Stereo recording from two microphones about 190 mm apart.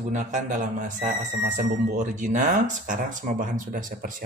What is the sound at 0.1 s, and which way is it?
Speech, 40° right (ahead or behind).